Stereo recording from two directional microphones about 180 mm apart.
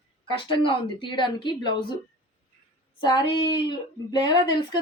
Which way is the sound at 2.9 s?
25° left (ahead or behind).